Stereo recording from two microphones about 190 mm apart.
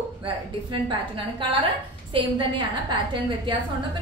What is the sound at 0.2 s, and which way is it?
A woman's voice, 25° right (ahead or behind).